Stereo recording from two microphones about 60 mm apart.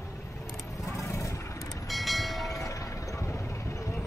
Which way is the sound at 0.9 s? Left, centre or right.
Left.